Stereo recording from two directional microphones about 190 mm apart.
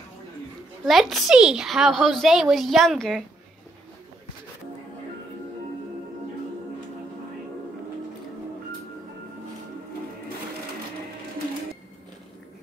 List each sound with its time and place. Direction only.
0.8 s a woman's voice: centre (ahead or behind)